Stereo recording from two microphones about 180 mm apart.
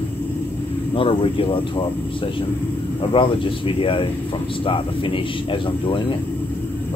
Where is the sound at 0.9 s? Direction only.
30° left (ahead or behind).